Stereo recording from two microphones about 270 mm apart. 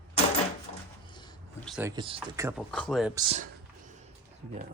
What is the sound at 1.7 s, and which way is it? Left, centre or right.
Speech, centre.